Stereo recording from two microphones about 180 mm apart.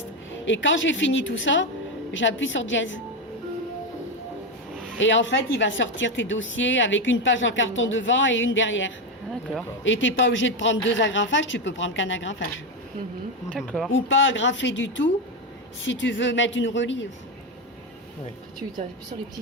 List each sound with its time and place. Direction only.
0.4 s a woman's voice: 90° left
4.9 s a woman's voice: 90° left
13.5 s speech: 5° left (ahead or behind)
13.9 s a woman's voice: 90° left